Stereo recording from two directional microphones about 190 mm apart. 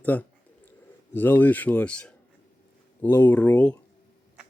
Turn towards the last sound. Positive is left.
turn(degrees=5)  # may be behind; listen again after turning